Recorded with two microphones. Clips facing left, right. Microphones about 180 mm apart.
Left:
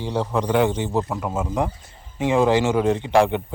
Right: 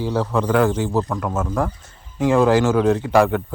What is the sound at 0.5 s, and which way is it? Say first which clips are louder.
Speech: right 2 dB; centre (ahead or behind).